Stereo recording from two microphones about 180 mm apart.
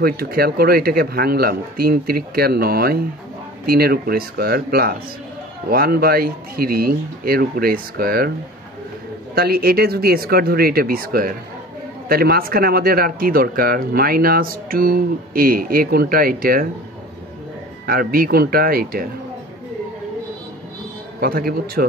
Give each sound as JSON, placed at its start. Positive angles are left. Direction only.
{"t": 0.0, "sound": "speech", "side_deg": -55}
{"t": 9.3, "sound": "speech", "side_deg": -60}
{"t": 17.8, "sound": "speech", "side_deg": -55}
{"t": 21.2, "sound": "speech", "side_deg": -55}